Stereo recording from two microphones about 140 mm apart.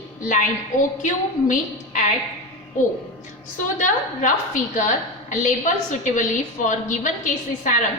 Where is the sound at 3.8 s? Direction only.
65° left (ahead or behind).